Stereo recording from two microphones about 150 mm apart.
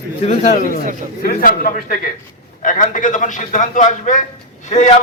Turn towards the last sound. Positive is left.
turn(degrees=55)  # may be behind; listen again after turning